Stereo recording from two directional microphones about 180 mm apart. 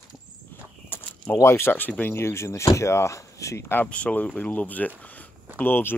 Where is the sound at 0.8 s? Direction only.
10° left (ahead or behind).